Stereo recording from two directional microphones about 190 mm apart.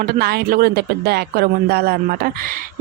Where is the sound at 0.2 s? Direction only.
55° right (ahead or behind).